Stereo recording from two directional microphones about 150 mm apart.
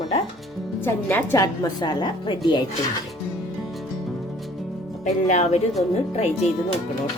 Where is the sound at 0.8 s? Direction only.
15° left (ahead or behind).